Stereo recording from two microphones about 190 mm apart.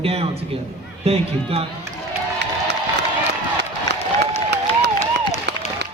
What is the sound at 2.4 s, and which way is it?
Crowd, 65° right (ahead or behind).